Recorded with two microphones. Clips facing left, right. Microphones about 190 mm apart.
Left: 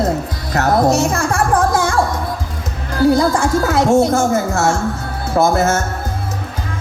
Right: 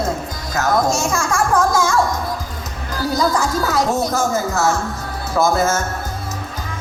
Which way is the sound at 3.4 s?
55° left (ahead or behind).